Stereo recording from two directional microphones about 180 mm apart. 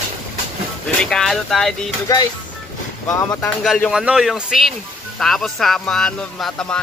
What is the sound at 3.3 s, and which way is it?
Speech, 10° left (ahead or behind).